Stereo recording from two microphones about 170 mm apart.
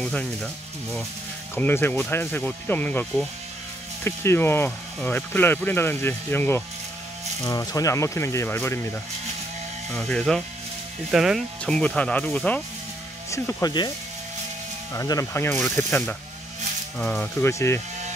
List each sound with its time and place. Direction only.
0.0 s speech: 5° left (ahead or behind)
1.5 s speech: 10° left (ahead or behind)
9.9 s speech: 5° left (ahead or behind)
13.3 s speech: 20° left (ahead or behind)
15.0 s speech: 20° left (ahead or behind)